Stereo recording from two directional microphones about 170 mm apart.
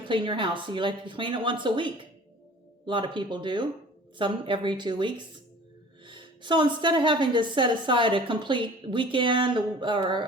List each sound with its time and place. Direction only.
0.0 s a woman's voice: 30° right (ahead or behind)